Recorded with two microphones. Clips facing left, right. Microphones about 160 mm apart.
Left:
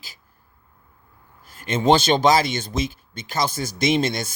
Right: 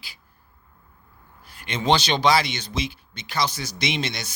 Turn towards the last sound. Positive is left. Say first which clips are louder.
# left 7 dB
turn(degrees=50)  # may be behind; listen again after turning